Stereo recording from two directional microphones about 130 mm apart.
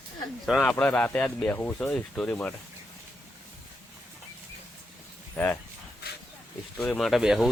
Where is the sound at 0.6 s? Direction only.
10° left (ahead or behind).